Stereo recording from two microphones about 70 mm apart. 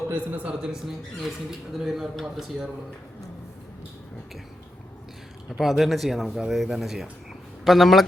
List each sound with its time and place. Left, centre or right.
0.1 s a man's voice: right
1.2 s speech: centre
5.5 s speech: centre